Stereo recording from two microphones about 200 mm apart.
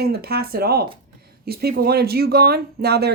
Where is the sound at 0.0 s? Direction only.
50° right (ahead or behind).